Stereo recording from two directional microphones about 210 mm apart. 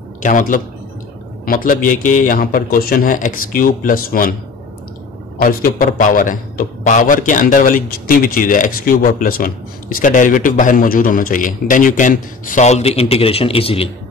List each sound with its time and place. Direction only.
0.2 s a man's voice: 40° left (ahead or behind)
5.4 s a man's voice: 40° left (ahead or behind); by 13.8 s 25° left (ahead or behind)